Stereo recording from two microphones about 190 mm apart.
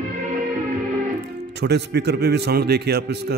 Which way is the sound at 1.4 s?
60° right (ahead or behind).